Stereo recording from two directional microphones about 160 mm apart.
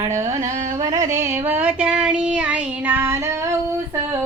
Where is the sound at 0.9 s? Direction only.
50° right (ahead or behind).